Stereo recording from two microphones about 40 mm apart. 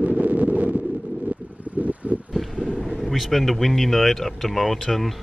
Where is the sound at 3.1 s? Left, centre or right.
Centre.